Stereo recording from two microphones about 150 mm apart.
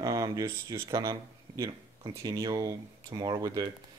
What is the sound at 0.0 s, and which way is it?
Speech, 25° right (ahead or behind).